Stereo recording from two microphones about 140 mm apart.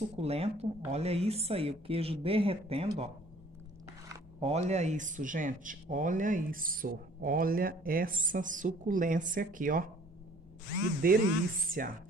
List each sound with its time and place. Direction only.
0.2 s a woman's voice: 45° right (ahead or behind)
4.4 s speech: 50° right (ahead or behind); by 9.8 s 75° right (ahead or behind)
11.0 s speech: 90° right